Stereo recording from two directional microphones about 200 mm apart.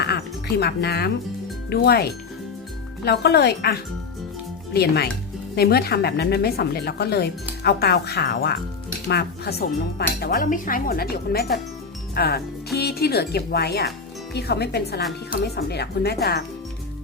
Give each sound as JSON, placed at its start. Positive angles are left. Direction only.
{"t": 0.0, "sound": "music", "side_deg": 55}
{"t": 1.7, "sound": "a woman's voice", "side_deg": 50}